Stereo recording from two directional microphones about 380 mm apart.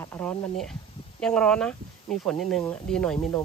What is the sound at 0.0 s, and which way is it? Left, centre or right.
Speech, centre.